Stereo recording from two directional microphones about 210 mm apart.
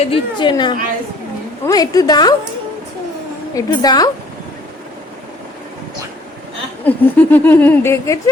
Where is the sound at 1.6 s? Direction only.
15° left (ahead or behind).